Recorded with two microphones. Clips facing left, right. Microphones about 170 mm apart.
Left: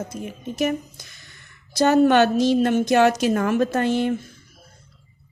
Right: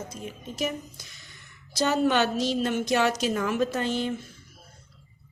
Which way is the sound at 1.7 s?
60° left (ahead or behind).